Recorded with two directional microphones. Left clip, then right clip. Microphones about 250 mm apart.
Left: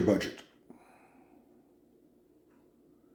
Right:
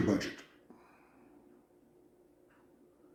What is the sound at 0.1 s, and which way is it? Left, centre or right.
Speech, left.